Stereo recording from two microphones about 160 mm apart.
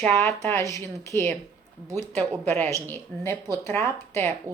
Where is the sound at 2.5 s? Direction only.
15° left (ahead or behind).